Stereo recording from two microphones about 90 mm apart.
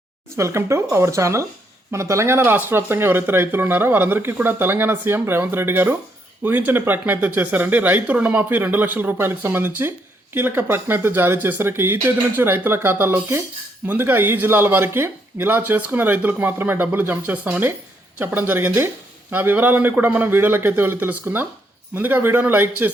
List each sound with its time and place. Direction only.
0.3 s speech: 35° right (ahead or behind)